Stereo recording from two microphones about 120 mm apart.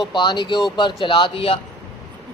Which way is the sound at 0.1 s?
40° left (ahead or behind).